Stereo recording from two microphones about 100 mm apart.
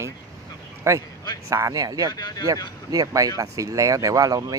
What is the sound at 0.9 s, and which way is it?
Speech, 30° right (ahead or behind).